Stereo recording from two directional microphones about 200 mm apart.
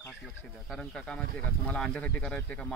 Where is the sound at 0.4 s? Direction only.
5° left (ahead or behind).